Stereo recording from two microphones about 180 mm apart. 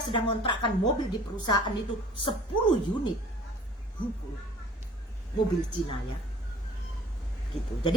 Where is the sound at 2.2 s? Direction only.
30° left (ahead or behind).